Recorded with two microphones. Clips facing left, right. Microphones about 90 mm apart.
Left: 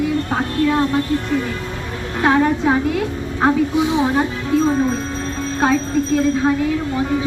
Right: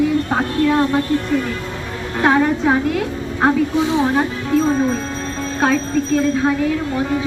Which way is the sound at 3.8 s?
15° left (ahead or behind).